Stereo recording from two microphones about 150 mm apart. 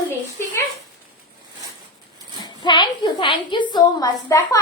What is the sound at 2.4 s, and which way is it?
A woman's voice, 30° left (ahead or behind).